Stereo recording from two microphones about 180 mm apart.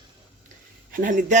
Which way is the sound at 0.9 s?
50° right (ahead or behind).